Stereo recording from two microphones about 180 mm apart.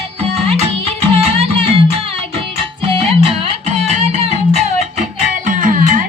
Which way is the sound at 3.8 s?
35° right (ahead or behind).